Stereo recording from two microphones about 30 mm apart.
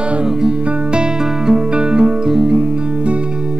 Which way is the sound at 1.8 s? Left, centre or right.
Right.